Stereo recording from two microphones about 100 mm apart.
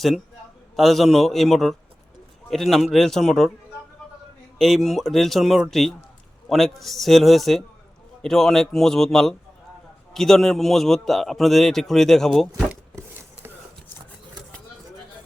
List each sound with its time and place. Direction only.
0.8 s a man's voice: centre (ahead or behind)
4.5 s a man's voice: centre (ahead or behind)
13.0 s a sound: 25° right (ahead or behind)